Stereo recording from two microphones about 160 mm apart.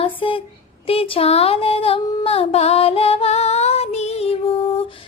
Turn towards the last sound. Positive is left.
turn(degrees=40)  # may be behind; listen again after turning